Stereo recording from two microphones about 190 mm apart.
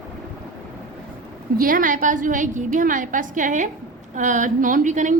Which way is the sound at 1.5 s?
45° right (ahead or behind).